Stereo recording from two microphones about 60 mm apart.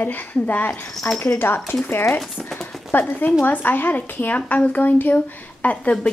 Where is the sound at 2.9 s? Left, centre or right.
Left.